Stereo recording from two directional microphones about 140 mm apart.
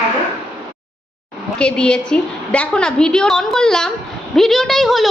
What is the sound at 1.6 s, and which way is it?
A woman's voice, 5° left (ahead or behind).